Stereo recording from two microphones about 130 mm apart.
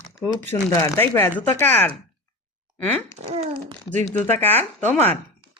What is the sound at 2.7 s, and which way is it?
Speech, 10° left (ahead or behind).